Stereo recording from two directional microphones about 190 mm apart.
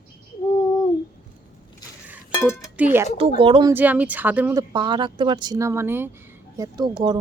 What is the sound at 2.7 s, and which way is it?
Speech, 10° right (ahead or behind).